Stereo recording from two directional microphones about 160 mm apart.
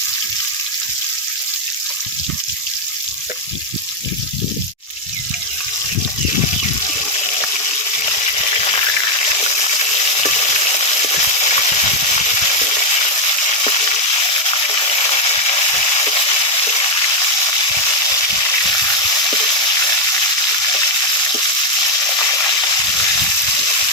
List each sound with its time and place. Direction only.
8.6 s frying: 35° left (ahead or behind)
10.2 s frying: 40° left (ahead or behind)
14.5 s a sound: 30° left (ahead or behind)